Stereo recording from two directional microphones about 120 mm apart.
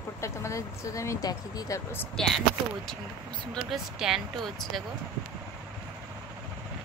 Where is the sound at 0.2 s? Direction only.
25° left (ahead or behind).